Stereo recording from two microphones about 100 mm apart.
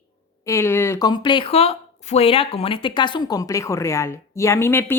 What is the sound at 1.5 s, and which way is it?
Speech, 80° left.